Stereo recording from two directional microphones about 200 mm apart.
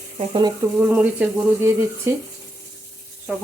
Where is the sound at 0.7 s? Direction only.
10° right (ahead or behind).